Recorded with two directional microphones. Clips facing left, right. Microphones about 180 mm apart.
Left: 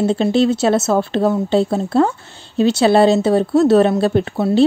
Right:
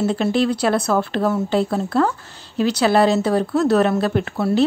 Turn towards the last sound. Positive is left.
turn(degrees=25)  # may be behind; listen again after turning